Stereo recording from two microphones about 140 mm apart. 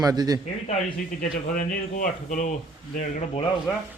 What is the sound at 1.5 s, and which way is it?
Speech, 70° left (ahead or behind).